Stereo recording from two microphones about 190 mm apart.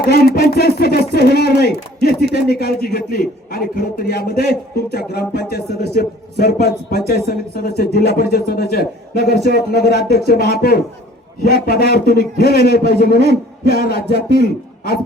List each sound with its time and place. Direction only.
0.0 s a man's voice: 55° left (ahead or behind)